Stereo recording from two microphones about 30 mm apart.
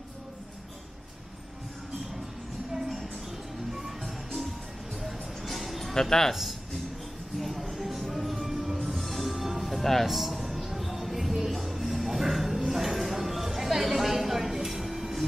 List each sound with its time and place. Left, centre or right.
3.7 s music: centre
5.9 s speech: centre
7.3 s music: centre